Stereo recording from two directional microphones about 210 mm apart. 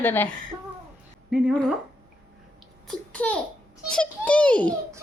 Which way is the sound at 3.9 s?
5° left (ahead or behind).